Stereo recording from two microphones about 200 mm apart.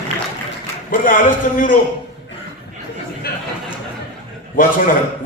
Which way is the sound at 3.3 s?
50° left (ahead or behind).